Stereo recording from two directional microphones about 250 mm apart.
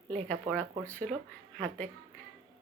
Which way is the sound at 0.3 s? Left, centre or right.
Centre.